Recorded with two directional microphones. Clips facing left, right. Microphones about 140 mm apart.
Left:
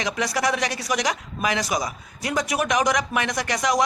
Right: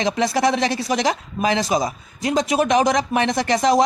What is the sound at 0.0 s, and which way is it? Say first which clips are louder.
Speech: right 6 dB; 30° right (ahead or behind).